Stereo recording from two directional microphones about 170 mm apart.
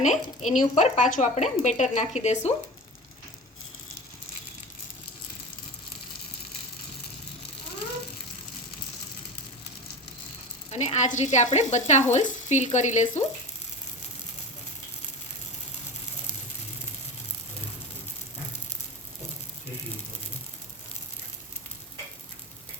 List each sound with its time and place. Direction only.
0.0 s speech: 45° left (ahead or behind)
10.7 s speech: 40° left (ahead or behind)